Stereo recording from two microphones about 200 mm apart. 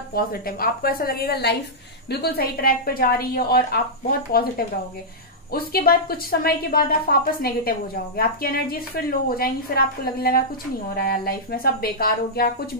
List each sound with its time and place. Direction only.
0.1 s a woman's voice: 50° left (ahead or behind)